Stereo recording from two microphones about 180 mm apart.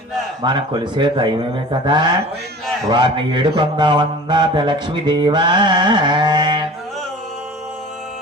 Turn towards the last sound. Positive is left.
turn(degrees=-25)  # may be behind; listen again after turning